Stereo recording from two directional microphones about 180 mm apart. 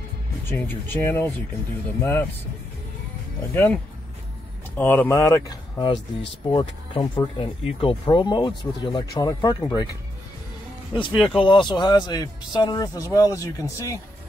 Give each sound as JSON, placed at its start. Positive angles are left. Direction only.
{"t": 0.5, "sound": "speech", "side_deg": 10}
{"t": 3.5, "sound": "speech", "side_deg": 10}
{"t": 10.9, "sound": "speech", "side_deg": 25}